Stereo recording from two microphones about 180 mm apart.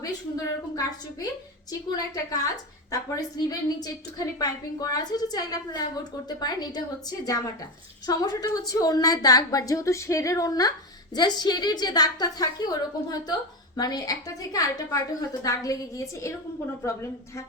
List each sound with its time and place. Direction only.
0.0 s a woman's voice: 20° left (ahead or behind)